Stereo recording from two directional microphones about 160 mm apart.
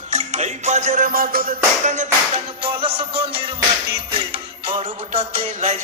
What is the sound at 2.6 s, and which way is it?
Music, 35° right (ahead or behind).